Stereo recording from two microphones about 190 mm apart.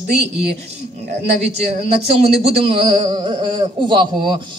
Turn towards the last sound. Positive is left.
turn(degrees=-25)  # may be behind; listen again after turning